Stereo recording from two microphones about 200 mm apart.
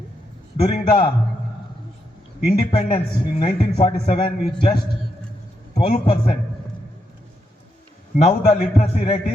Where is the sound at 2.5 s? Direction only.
25° left (ahead or behind).